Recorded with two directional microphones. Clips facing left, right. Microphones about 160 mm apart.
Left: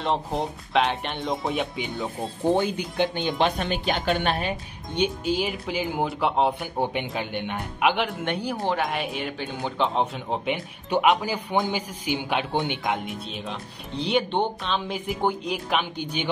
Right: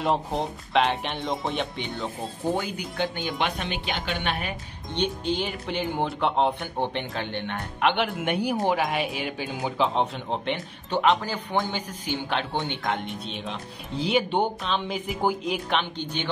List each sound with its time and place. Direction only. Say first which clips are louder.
0.0 s speech: even; centre (ahead or behind)
2.4 s speech: left 5 dB; 25° left (ahead or behind)
3.3 s a woman's voice: left 6 dB; 35° left (ahead or behind)
4.9 s speech: left 2 dB; 10° left (ahead or behind)